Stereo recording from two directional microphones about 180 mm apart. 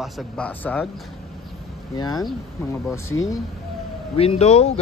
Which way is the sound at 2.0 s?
20° left (ahead or behind).